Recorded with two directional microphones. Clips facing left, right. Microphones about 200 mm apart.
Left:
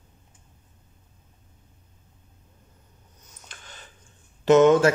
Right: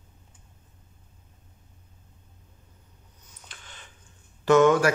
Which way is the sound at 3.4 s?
40° left (ahead or behind).